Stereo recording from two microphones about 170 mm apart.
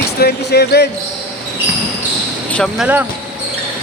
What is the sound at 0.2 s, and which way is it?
Speech, 70° left (ahead or behind).